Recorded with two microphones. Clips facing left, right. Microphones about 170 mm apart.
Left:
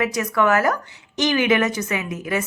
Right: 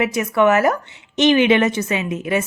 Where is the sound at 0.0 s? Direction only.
20° right (ahead or behind).